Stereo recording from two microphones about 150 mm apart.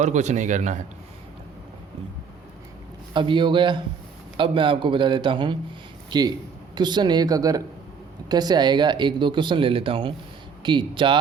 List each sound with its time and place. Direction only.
0.0 s a man's voice: 50° right (ahead or behind)
3.1 s speech: 30° right (ahead or behind)